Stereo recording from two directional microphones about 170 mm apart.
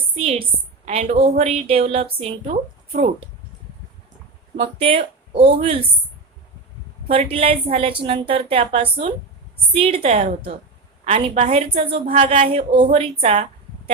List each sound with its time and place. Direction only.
0.2 s a woman's voice: 35° right (ahead or behind)
4.5 s a woman's voice: 35° right (ahead or behind)
7.1 s a woman's voice: 35° right (ahead or behind)
12.1 s speech: 50° right (ahead or behind)
12.5 s a woman's voice: 30° right (ahead or behind)